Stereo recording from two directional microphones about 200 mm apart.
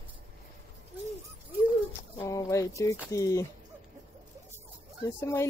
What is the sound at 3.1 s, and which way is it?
Speech, 15° left (ahead or behind).